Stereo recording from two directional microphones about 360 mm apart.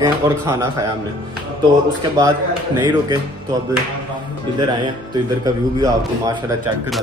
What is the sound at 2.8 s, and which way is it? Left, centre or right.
Speech, centre.